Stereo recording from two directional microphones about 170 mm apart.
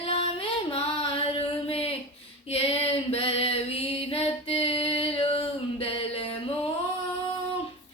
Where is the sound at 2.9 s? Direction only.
35° left (ahead or behind).